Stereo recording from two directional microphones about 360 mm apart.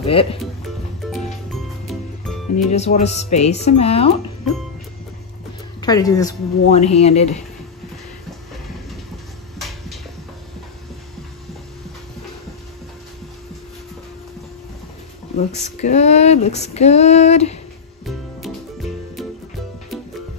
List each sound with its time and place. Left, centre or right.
0.0 s speech: centre
2.7 s speech: centre
5.8 s speech: centre
9.6 s a sound: centre
15.3 s speech: centre